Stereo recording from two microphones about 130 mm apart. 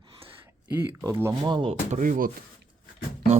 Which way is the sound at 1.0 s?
20° right (ahead or behind).